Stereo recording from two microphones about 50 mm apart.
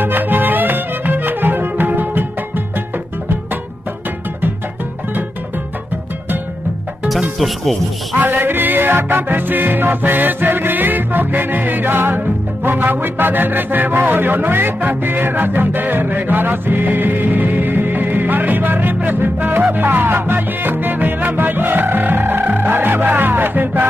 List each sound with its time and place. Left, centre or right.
0.0 s music: right
7.3 s speech: centre
8.2 s music: right